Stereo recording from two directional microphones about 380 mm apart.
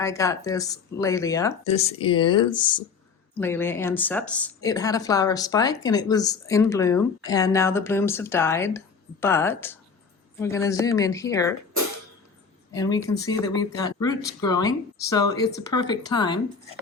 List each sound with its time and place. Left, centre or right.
0.0 s speech: centre
12.7 s speech: centre